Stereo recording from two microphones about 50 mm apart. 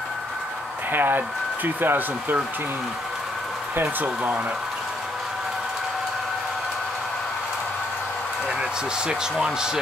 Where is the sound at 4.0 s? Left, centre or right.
Right.